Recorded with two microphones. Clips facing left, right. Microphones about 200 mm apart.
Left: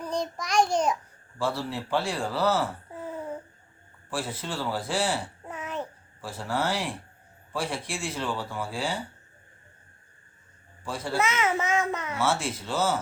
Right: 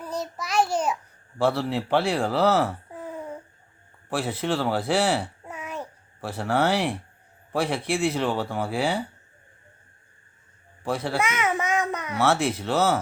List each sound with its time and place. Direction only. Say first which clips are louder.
0.0 s child singing: left 1 dB; 5° right (ahead or behind)
1.4 s speech: right 6 dB; 65° right (ahead or behind)
4.1 s speech: right 7 dB; 65° right (ahead or behind)
5.5 s babbling: left 1 dB; 10° right (ahead or behind)
6.2 s speech: right 6 dB; 65° right (ahead or behind)
10.8 s speech: right 5 dB; 65° right (ahead or behind)
11.2 s a child's voice: right 1 dB; 15° right (ahead or behind)
12.2 s speech: right 6 dB; 60° right (ahead or behind)